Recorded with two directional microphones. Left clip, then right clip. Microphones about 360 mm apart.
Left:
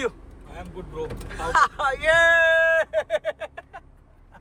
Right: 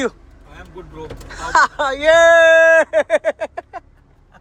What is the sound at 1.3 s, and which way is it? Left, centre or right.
Speech, centre.